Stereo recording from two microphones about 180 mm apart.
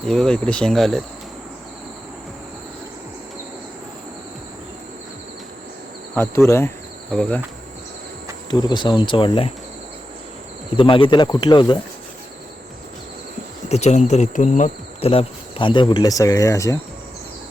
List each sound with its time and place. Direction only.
0.0 s speech: 5° left (ahead or behind)
6.1 s speech: 15° left (ahead or behind)
8.4 s speech: 25° left (ahead or behind)
10.8 s speech: 30° left (ahead or behind)
13.7 s speech: 35° left (ahead or behind); by 16.7 s 15° left (ahead or behind)